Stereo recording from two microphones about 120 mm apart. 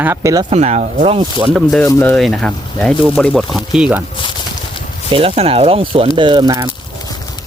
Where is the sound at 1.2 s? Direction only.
45° right (ahead or behind).